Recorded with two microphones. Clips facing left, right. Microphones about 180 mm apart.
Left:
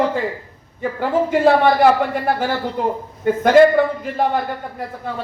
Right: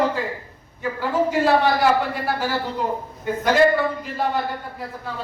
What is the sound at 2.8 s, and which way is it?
A man's voice, 50° left (ahead or behind).